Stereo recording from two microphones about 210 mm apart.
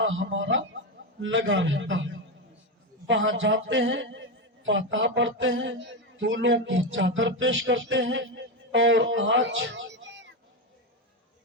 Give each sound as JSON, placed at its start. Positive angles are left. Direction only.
{"t": 0.0, "sound": "a man's voice", "side_deg": -65}